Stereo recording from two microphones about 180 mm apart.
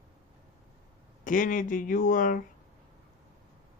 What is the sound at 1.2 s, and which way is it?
Speech, 45° left (ahead or behind).